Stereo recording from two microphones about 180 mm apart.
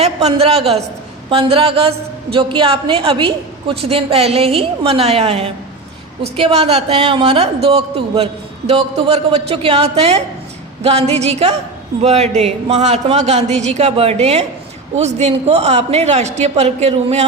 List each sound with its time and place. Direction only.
0.0 s a woman's voice: 35° right (ahead or behind)